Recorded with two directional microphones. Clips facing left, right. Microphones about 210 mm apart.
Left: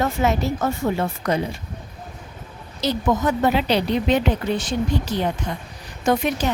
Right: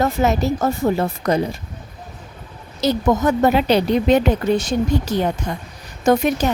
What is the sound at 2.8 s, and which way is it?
Speech, 45° right (ahead or behind).